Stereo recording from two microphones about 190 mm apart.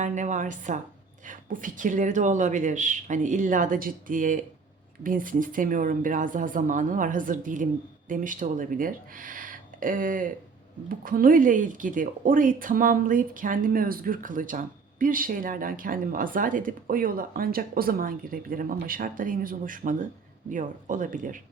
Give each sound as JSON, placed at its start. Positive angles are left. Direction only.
{"t": 0.0, "sound": "a woman's voice", "side_deg": -40}